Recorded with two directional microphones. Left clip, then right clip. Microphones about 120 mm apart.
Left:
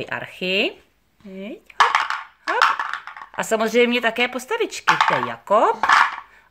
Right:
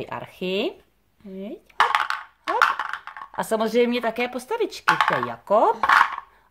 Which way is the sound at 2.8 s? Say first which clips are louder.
Left 3 dB; 25° right (ahead or behind).